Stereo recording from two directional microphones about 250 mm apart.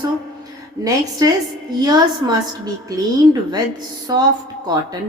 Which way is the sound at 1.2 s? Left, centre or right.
Centre.